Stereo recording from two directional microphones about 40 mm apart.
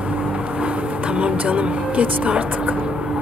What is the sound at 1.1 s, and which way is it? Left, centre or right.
Speech, right.